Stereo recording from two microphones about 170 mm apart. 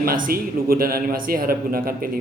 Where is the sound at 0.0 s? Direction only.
60° right (ahead or behind).